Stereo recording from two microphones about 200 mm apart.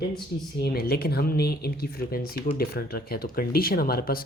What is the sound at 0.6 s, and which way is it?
Speech, 50° left (ahead or behind).